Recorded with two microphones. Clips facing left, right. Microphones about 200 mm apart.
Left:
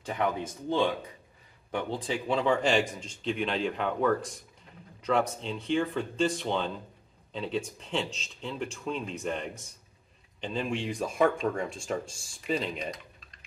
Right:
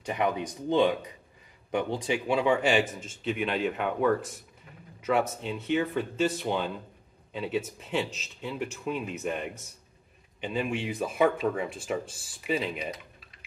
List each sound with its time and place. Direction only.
0.0 s speech: 10° right (ahead or behind)